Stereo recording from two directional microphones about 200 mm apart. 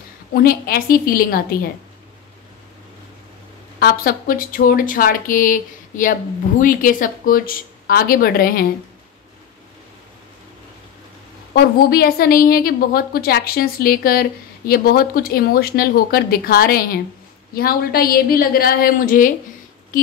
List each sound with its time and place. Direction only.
0.3 s a woman's voice: 50° left (ahead or behind)
3.8 s a woman's voice: 45° left (ahead or behind)
11.5 s a woman's voice: 50° left (ahead or behind)